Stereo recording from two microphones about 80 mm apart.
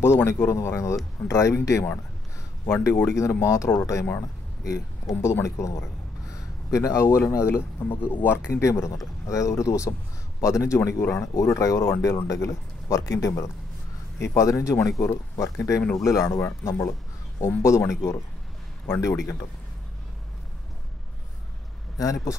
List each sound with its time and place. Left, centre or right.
0.0 s speech: left
21.9 s speech: left